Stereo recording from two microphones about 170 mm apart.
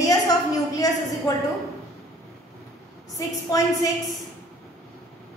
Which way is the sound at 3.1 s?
20° left (ahead or behind).